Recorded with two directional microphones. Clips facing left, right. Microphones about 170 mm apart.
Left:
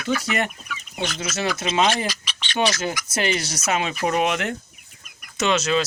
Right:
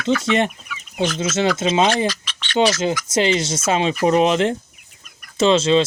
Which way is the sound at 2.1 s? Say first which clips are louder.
Right 1 dB; 15° left (ahead or behind).